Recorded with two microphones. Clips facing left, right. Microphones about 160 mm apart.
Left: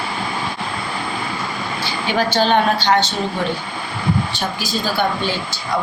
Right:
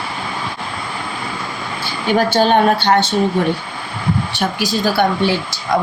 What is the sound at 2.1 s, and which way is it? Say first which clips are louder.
A woman's voice: right 3 dB; 50° right (ahead or behind).